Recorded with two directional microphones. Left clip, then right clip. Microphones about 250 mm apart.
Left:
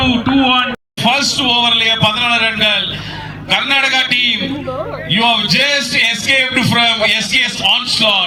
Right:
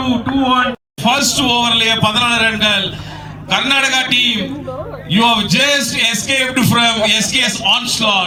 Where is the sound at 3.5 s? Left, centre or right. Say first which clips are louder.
Left 1 dB; right.